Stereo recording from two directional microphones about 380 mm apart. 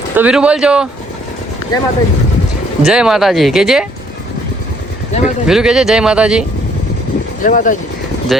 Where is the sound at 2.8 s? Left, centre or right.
Centre.